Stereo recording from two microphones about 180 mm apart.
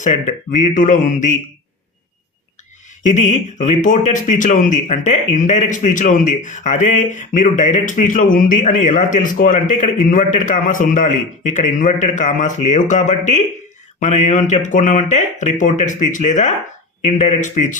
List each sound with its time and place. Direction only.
0.0 s speech: 40° left (ahead or behind)
3.0 s speech: 45° left (ahead or behind)